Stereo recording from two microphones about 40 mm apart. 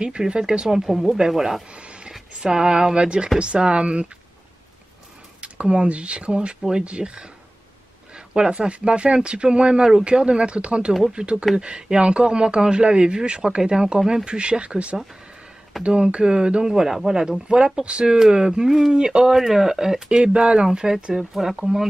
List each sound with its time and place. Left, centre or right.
0.0 s speech: right
0.8 s speech: centre
1.7 s a sound: right
2.4 s speech: centre
5.4 s speech: right
8.3 s speech: right
10.9 s speech: centre
11.1 s speech: right
16.7 s speech: centre
20.1 s speech: right; by 21.8 s centre